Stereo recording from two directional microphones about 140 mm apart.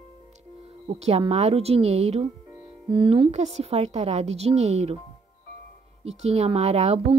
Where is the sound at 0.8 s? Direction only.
50° right (ahead or behind).